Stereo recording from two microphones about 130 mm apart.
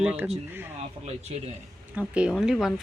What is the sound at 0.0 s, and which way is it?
Speech, 10° right (ahead or behind).